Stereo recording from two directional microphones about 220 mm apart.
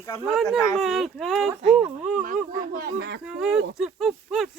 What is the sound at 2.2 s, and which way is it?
Speech, 40° right (ahead or behind).